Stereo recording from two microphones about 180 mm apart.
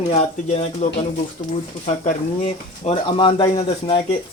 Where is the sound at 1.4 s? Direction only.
45° left (ahead or behind).